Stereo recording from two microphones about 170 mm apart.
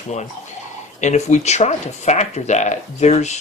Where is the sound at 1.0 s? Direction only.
40° left (ahead or behind).